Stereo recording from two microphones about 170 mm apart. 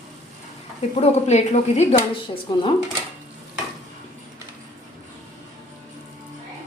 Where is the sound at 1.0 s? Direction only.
40° left (ahead or behind).